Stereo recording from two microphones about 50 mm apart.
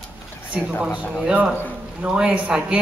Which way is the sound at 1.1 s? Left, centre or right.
Centre.